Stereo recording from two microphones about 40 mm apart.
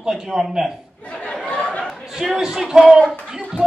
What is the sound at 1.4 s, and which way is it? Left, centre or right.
Chatter, left.